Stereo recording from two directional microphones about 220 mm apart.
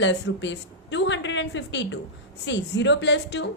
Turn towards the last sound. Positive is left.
turn(degrees=50)  # may be behind; listen again after turning